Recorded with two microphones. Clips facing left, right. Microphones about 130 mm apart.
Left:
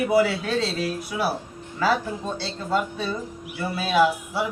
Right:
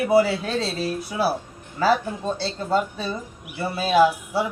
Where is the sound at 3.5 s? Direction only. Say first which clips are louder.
Right 3 dB; 35° right (ahead or behind).